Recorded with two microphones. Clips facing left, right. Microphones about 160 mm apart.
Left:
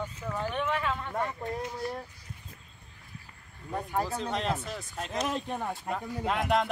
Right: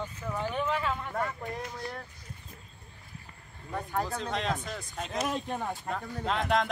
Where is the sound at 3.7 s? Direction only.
10° left (ahead or behind).